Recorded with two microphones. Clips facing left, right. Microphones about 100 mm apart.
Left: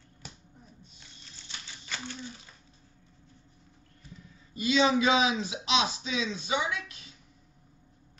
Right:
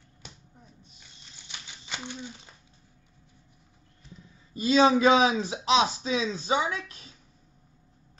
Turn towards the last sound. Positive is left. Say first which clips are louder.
# right 2 dB
turn(degrees=-40)  # may be behind; listen again after turning